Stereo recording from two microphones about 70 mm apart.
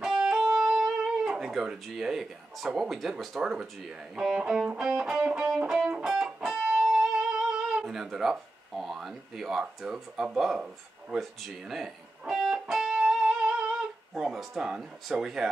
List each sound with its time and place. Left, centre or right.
0.0 s music: centre
1.5 s speech: centre
6.1 s music: centre
11.4 s speech: centre
12.3 s music: centre